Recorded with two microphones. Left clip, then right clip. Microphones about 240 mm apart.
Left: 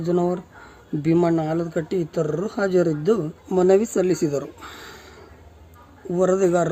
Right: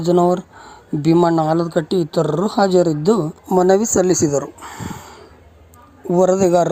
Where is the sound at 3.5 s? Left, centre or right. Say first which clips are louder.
Right 4 dB; centre.